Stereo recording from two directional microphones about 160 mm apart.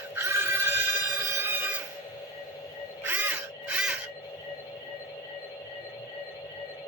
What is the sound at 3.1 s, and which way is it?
Crow, 10° right (ahead or behind).